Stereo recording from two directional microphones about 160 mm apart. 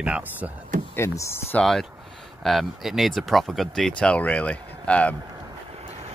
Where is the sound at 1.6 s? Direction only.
Centre (ahead or behind).